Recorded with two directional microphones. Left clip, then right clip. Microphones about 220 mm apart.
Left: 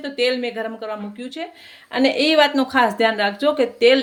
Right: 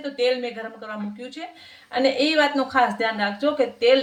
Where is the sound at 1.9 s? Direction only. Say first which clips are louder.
Left 3 dB; 45° left (ahead or behind).